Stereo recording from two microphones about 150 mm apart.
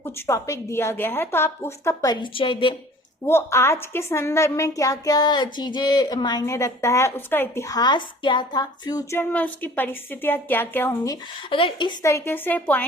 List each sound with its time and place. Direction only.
0.0 s a woman's voice: 20° left (ahead or behind); by 2.7 s 35° left (ahead or behind)
3.2 s a woman's voice: 15° left (ahead or behind)
11.5 s speech: 35° left (ahead or behind)
12.0 s a woman's voice: 15° left (ahead or behind)